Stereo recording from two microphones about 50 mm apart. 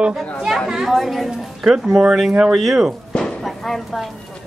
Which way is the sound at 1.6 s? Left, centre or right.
Centre.